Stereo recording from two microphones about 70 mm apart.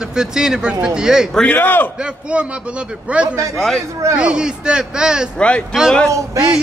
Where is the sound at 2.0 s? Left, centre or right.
Centre.